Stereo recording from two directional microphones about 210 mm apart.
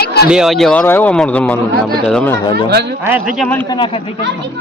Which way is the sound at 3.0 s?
10° right (ahead or behind).